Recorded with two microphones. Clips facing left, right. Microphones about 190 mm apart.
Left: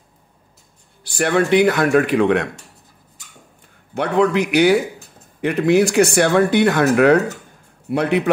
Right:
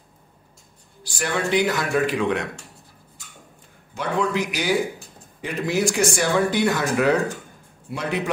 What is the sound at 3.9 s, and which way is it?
A man's voice, 65° left (ahead or behind).